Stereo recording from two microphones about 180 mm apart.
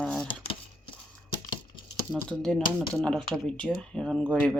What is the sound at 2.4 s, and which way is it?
Speech, 5° left (ahead or behind).